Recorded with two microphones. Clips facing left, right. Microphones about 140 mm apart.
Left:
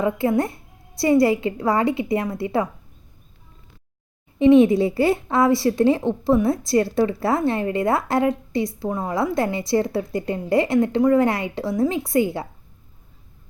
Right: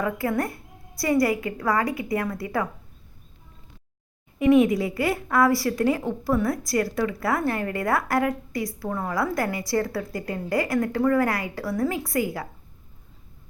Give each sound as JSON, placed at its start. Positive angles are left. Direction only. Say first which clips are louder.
{"t": 0.0, "sound": "speech", "louder": "left 5 dB", "side_deg": 25}
{"t": 4.4, "sound": "speech", "louder": "left 5 dB", "side_deg": 25}